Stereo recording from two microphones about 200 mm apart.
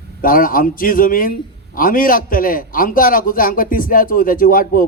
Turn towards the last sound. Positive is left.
turn(degrees=45)  # may be behind; listen again after turning